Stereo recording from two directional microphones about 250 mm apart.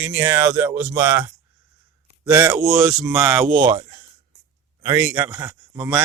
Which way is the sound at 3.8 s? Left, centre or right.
Right.